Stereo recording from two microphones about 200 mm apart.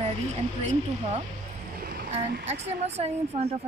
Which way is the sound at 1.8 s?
50° right (ahead or behind).